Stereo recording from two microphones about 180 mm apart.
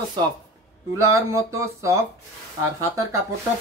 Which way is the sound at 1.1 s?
15° right (ahead or behind).